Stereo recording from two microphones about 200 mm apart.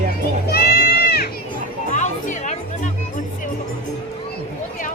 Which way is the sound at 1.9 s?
35° left (ahead or behind).